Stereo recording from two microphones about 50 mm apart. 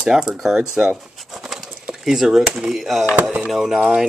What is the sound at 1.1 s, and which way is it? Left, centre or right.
Pigeon, centre.